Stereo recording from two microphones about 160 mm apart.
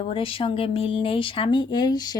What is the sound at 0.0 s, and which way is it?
Speech, 35° left (ahead or behind).